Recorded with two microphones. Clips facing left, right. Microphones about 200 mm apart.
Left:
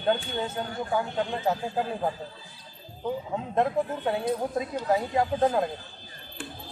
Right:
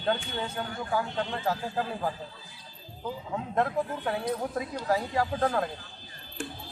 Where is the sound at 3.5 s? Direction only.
20° left (ahead or behind).